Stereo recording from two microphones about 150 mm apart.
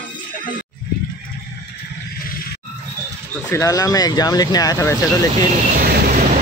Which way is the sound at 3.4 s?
20° left (ahead or behind).